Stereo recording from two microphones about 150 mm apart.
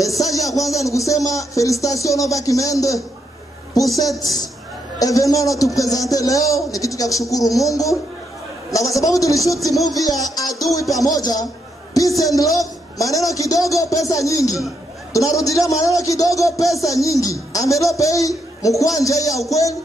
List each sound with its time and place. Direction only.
0.0 s a man's voice: 20° left (ahead or behind)
4.2 s speech: 25° left (ahead or behind)